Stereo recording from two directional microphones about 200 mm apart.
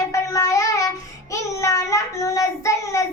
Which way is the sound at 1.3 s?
15° left (ahead or behind).